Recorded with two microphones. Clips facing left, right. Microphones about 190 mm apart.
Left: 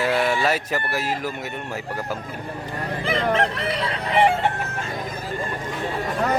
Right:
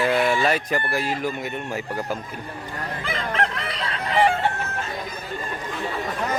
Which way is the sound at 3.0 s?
20° left (ahead or behind).